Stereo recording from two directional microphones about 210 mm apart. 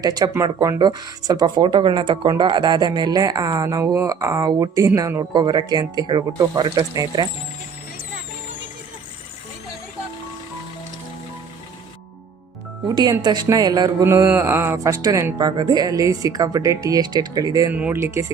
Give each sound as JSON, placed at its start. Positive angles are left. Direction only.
{"t": 0.0, "sound": "speech", "side_deg": -20}
{"t": 12.9, "sound": "speech", "side_deg": -20}